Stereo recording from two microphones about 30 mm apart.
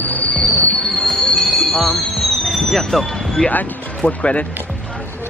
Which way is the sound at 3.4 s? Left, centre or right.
Left.